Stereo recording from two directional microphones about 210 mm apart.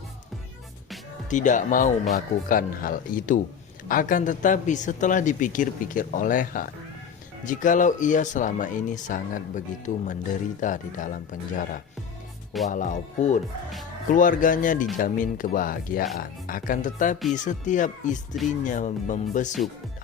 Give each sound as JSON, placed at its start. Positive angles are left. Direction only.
{"t": 1.3, "sound": "speech", "side_deg": 35}